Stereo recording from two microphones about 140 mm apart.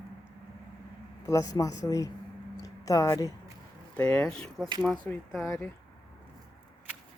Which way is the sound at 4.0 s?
10° left (ahead or behind).